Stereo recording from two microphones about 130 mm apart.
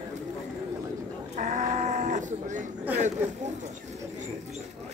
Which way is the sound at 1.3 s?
70° right (ahead or behind).